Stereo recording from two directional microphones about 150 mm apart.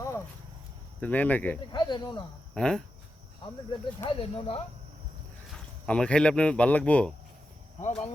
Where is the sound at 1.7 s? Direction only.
30° left (ahead or behind).